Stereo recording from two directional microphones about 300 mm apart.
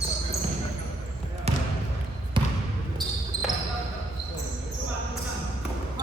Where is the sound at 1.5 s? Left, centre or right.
Right.